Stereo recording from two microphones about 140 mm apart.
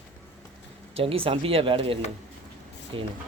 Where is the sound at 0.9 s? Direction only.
40° right (ahead or behind).